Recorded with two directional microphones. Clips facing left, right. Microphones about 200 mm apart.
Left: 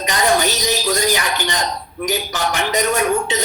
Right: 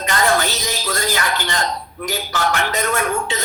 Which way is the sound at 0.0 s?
15° left (ahead or behind).